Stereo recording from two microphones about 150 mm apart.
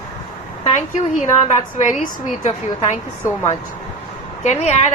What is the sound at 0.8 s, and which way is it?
A woman's voice, 50° left (ahead or behind).